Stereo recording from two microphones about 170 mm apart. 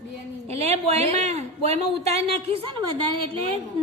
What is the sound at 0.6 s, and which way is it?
Speech, 40° right (ahead or behind).